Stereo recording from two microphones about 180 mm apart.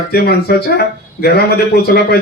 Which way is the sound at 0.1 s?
60° left (ahead or behind).